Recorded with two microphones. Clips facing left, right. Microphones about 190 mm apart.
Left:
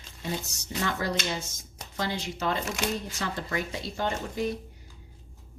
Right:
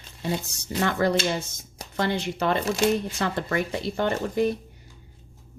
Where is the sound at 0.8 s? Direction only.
55° right (ahead or behind).